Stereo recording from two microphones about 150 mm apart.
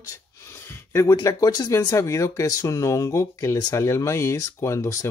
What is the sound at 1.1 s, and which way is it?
Speech, 25° left (ahead or behind).